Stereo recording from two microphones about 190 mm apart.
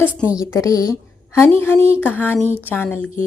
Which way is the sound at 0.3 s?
15° left (ahead or behind).